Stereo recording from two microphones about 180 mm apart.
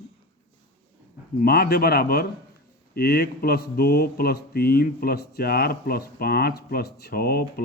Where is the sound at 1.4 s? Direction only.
55° left (ahead or behind).